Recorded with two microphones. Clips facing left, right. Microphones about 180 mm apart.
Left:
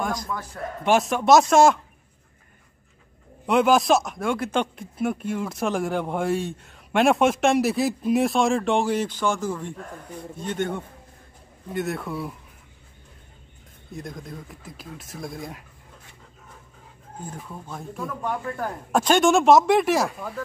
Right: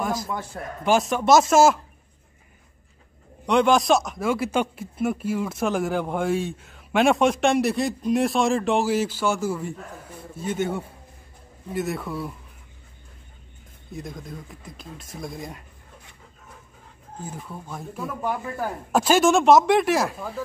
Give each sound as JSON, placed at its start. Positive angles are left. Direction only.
{"t": 0.0, "sound": "a sound", "side_deg": -5}
{"t": 0.3, "sound": "a man's voice", "side_deg": -25}
{"t": 0.8, "sound": "speech", "side_deg": 0}
{"t": 3.4, "sound": "speech", "side_deg": 5}
{"t": 13.9, "sound": "speech", "side_deg": 0}
{"t": 17.2, "sound": "speech", "side_deg": -5}